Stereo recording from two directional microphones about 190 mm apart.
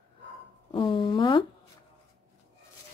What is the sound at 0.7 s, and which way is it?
Speech, 25° left (ahead or behind).